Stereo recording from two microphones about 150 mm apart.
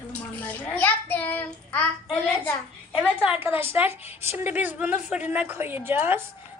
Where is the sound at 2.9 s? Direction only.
5° right (ahead or behind).